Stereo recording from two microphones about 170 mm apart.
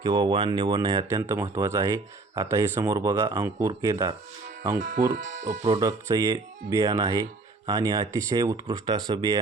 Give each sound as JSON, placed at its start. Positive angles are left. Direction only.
{"t": 0.0, "sound": "speech", "side_deg": -25}
{"t": 4.8, "sound": "speech", "side_deg": -50}
{"t": 5.8, "sound": "speech", "side_deg": -20}